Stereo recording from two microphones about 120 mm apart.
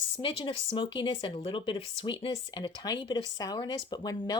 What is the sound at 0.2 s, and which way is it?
Speech, 45° left (ahead or behind).